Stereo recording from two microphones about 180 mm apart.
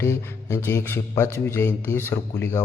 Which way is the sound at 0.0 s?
15° left (ahead or behind).